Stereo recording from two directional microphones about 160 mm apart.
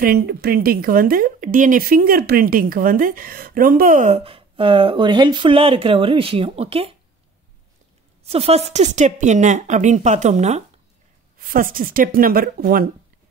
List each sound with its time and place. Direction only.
0.0 s speech: 80° right; by 7.0 s 35° right (ahead or behind)
8.2 s speech: 40° right (ahead or behind)
11.3 s speech: 60° right (ahead or behind)